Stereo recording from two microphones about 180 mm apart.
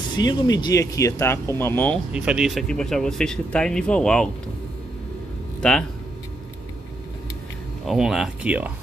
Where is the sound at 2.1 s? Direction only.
5° right (ahead or behind).